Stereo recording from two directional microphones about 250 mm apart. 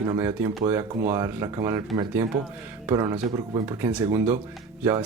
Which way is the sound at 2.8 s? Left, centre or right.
Centre.